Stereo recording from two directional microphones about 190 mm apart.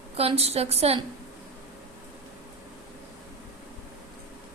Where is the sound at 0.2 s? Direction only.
30° right (ahead or behind).